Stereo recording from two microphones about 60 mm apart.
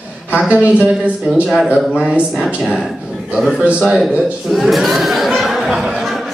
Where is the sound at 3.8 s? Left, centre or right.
Centre.